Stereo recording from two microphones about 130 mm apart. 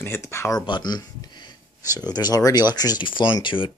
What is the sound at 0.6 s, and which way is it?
Speech, 35° left (ahead or behind).